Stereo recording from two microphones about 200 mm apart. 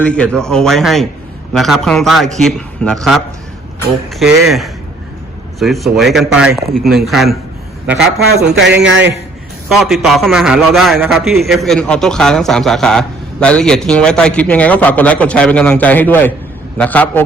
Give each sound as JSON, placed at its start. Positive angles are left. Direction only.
{"t": 0.0, "sound": "a man's voice", "side_deg": 5}
{"t": 5.5, "sound": "a man's voice", "side_deg": 0}
{"t": 8.2, "sound": "speech", "side_deg": -85}
{"t": 9.6, "sound": "a man's voice", "side_deg": 0}